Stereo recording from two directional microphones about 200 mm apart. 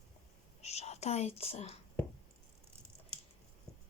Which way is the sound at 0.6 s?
30° left (ahead or behind).